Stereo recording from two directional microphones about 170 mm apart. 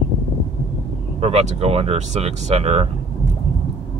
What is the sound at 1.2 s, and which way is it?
Speech, 35° right (ahead or behind).